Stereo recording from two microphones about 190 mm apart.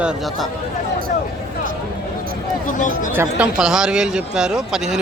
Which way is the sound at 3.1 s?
10° right (ahead or behind).